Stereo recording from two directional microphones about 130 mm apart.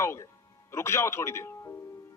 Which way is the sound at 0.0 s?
20° left (ahead or behind).